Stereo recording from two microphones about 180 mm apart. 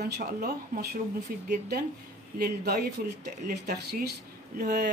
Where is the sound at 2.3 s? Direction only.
65° right (ahead or behind).